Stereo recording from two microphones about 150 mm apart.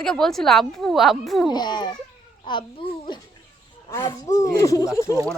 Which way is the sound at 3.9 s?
20° left (ahead or behind).